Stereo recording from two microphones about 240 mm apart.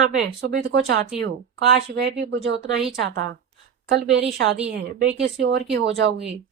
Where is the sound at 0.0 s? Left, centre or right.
Right.